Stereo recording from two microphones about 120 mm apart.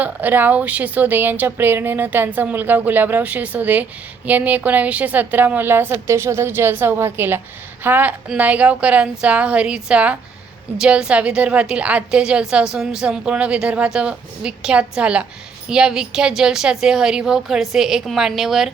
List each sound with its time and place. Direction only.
0.0 s a woman's voice: 15° right (ahead or behind)